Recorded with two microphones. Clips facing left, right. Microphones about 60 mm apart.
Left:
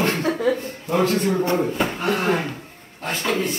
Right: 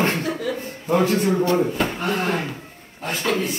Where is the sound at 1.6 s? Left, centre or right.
Centre.